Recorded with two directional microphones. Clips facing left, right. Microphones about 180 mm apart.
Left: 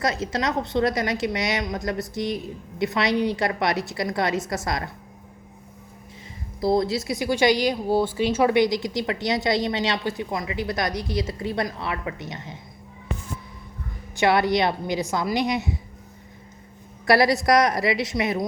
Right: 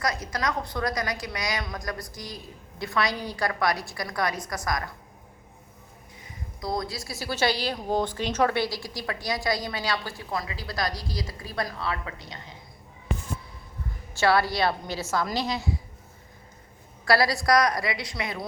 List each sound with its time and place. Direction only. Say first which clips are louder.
0.0 s a woman's voice: left 4 dB; 25° left (ahead or behind)
6.6 s a woman's voice: left 9 dB; 25° left (ahead or behind)
14.2 s a woman's voice: left 3 dB; 20° left (ahead or behind)
17.1 s a woman's voice: left 4 dB; 20° left (ahead or behind)